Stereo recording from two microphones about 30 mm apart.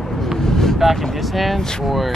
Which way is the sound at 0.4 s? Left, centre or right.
Centre.